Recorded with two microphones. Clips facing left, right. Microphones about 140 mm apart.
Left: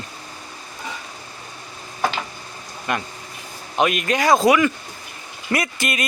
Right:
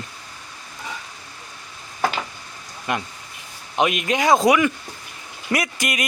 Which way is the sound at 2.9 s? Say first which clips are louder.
Even; 15° right (ahead or behind).